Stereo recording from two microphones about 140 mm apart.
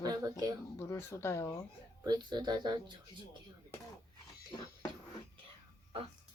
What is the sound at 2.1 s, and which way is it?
Speech, 30° right (ahead or behind).